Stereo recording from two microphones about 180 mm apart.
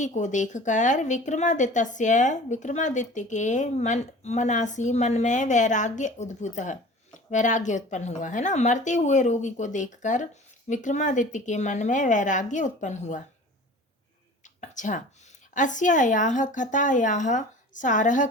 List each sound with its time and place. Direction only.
0.0 s a woman's voice: 40° left (ahead or behind)
14.4 s a sound: 45° left (ahead or behind)
15.5 s a woman's voice: 45° left (ahead or behind)